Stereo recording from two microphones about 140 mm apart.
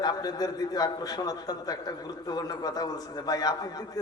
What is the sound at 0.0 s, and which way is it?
A man's voice, 30° left (ahead or behind).